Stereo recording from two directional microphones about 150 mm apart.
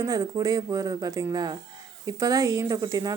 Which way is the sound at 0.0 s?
25° right (ahead or behind).